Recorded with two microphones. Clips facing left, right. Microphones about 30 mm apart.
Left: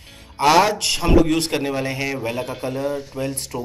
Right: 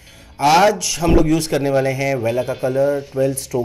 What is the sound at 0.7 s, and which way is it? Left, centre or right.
Speech, left.